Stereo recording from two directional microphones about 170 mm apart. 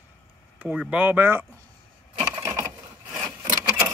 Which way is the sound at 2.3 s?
20° right (ahead or behind).